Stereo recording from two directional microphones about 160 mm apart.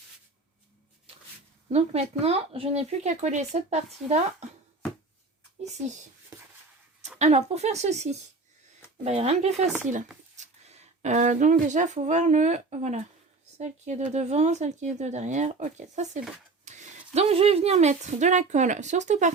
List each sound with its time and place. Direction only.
1.7 s speech: 40° right (ahead or behind)
7.2 s speech: 45° right (ahead or behind)